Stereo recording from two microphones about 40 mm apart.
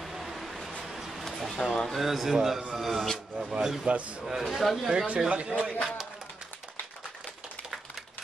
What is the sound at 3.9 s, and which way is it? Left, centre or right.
Speech, right.